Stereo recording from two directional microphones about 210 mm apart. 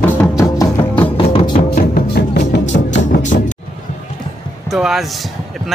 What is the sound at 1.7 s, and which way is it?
Music, 45° left (ahead or behind).